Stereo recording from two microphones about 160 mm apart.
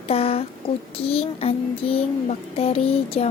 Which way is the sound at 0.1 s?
40° left (ahead or behind).